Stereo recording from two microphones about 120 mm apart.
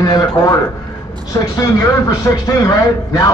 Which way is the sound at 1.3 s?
30° left (ahead or behind).